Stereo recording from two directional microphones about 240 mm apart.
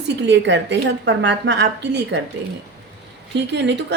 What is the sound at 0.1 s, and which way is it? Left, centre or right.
Speech, right.